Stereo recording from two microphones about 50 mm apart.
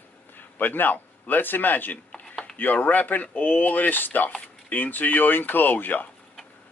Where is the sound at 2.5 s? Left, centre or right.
Left.